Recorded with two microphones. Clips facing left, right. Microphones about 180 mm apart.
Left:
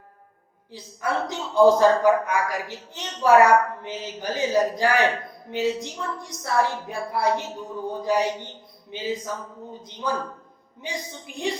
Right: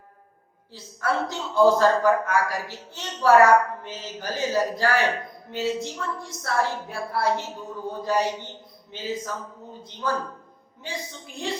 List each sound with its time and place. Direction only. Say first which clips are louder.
0.7 s a woman's voice: even; 15° left (ahead or behind)
11.3 s a woman's voice: left 2 dB; 15° left (ahead or behind)